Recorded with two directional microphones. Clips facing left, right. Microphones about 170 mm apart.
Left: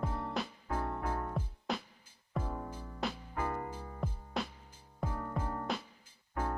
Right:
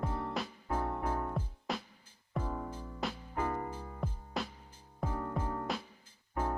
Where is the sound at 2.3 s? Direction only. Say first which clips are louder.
Right 1 dB; 10° left (ahead or behind).